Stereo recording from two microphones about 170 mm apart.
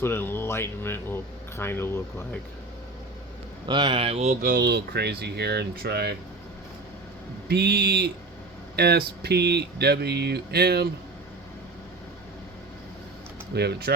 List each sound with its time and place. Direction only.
0.0 s speech: 10° left (ahead or behind)
3.7 s speech: 25° right (ahead or behind)
4.5 s speech: 75° right (ahead or behind)
7.4 s speech: 75° right (ahead or behind)
13.5 s speech: 70° right (ahead or behind)